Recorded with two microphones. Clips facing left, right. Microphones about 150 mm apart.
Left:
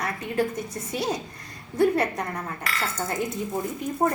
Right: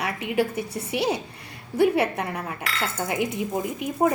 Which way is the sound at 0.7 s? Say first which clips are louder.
Right 3 dB; 70° right (ahead or behind).